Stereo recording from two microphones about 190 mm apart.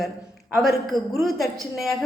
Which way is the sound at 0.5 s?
Centre (ahead or behind).